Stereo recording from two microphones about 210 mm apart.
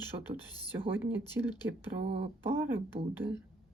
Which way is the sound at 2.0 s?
55° right (ahead or behind).